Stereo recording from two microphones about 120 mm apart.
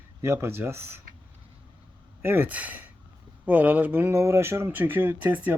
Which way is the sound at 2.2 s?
15° right (ahead or behind).